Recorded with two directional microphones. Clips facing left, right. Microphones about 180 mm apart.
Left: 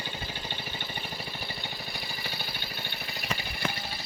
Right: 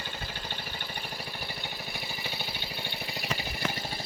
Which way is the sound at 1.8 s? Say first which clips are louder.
Right 1 dB; 20° right (ahead or behind).